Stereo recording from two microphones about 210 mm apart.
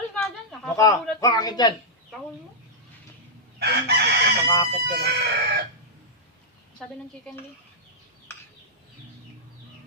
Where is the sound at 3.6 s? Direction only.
50° right (ahead or behind).